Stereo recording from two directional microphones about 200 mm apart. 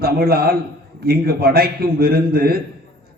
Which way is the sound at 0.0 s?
50° right (ahead or behind).